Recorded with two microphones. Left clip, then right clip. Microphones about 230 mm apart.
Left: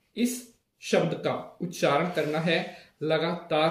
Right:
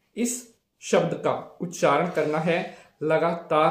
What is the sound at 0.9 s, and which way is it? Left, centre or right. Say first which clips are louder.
Speech: right 3 dB; centre.